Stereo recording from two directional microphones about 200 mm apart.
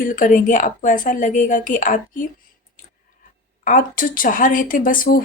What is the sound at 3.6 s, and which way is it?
Speech, 40° left (ahead or behind).